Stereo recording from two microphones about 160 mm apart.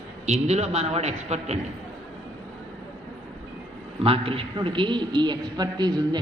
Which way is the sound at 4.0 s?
35° right (ahead or behind).